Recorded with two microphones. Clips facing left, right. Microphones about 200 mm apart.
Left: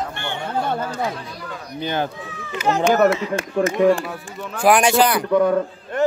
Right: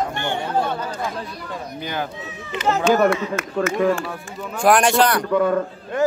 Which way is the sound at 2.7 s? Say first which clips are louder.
Left 1 dB; 5° left (ahead or behind).